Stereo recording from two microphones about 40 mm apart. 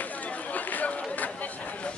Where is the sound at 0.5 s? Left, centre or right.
Left.